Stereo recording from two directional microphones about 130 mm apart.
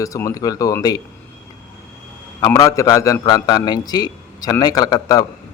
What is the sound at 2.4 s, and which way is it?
A man's voice, 25° left (ahead or behind).